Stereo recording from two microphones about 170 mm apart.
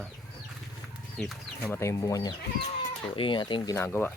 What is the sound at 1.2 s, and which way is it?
Speech, centre (ahead or behind).